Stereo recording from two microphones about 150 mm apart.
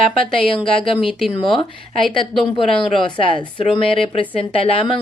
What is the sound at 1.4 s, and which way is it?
Speech, 35° left (ahead or behind).